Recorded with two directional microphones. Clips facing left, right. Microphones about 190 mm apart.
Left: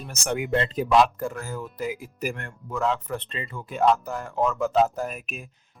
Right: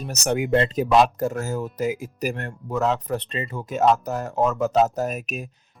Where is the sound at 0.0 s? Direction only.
40° right (ahead or behind).